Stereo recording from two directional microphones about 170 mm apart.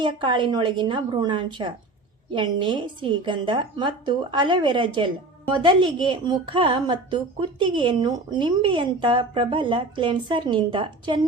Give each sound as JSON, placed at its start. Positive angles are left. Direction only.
{"t": 0.0, "sound": "a woman's voice", "side_deg": -30}